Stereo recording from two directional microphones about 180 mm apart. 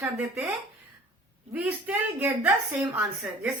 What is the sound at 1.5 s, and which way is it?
A woman's voice, 10° right (ahead or behind).